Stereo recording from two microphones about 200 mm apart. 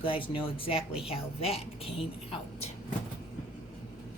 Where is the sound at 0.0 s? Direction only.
25° left (ahead or behind).